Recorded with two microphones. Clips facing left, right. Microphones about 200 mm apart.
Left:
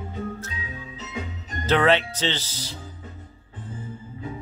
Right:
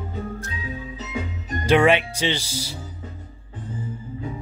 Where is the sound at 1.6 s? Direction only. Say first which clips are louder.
Right 3 dB; 10° right (ahead or behind).